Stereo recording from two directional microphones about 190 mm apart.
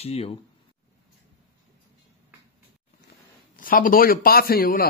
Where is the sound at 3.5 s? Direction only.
45° left (ahead or behind).